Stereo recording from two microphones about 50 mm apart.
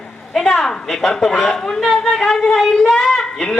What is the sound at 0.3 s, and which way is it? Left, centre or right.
A woman's voice, centre.